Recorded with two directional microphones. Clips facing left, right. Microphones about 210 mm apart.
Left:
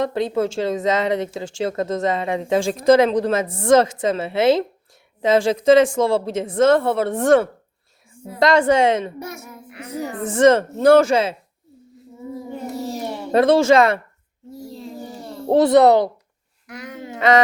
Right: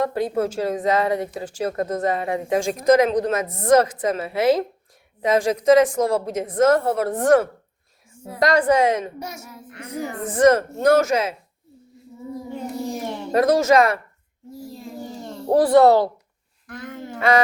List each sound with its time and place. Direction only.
0.1 s speech: 25° left (ahead or behind)
9.1 s a child's voice: 55° left (ahead or behind)
9.6 s a child's voice: 5° left (ahead or behind)
10.2 s speech: 25° left (ahead or behind)
13.3 s speech: 30° left (ahead or behind)
15.4 s speech: 25° left (ahead or behind)
16.6 s a sound: 10° left (ahead or behind)
17.1 s a sound: 20° left (ahead or behind)